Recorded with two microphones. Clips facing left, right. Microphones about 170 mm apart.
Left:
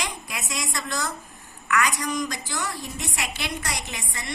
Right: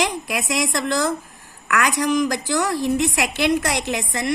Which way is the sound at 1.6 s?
80° right.